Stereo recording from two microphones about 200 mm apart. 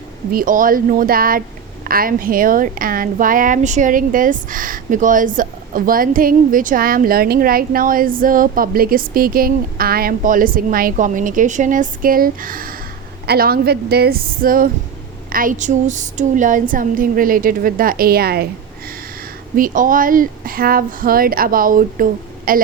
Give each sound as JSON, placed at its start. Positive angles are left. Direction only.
{"t": 0.3, "sound": "speech", "side_deg": -45}
{"t": 19.5, "sound": "speech", "side_deg": -45}